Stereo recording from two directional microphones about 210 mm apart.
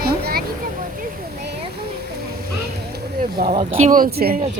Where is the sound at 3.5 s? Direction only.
25° right (ahead or behind).